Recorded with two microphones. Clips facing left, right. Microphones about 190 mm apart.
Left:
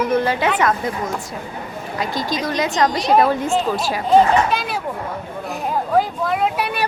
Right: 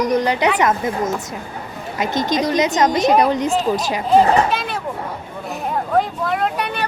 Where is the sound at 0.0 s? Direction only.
15° right (ahead or behind).